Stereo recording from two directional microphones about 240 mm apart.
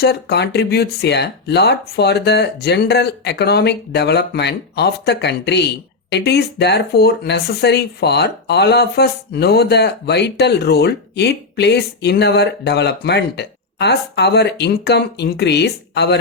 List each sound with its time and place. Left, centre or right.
0.0 s speech: left